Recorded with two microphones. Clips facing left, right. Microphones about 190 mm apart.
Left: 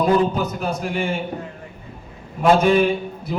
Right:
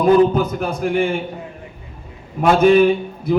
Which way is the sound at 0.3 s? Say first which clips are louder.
Right 4 dB; 55° right (ahead or behind).